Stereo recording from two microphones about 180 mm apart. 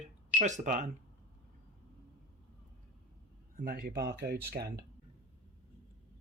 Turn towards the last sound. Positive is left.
turn(degrees=-60)  # may be behind; listen again after turning